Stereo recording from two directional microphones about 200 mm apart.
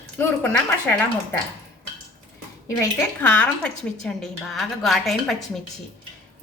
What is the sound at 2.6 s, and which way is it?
A woman's voice, 10° left (ahead or behind).